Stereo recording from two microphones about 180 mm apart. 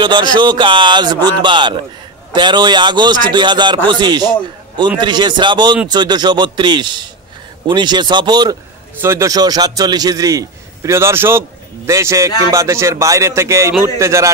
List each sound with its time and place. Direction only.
0.0 s a man's voice: 25° right (ahead or behind)